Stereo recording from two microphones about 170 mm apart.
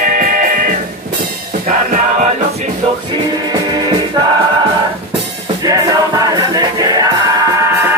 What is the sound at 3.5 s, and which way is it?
Music, 20° right (ahead or behind).